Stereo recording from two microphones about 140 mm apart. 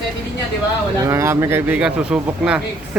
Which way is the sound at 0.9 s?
20° right (ahead or behind).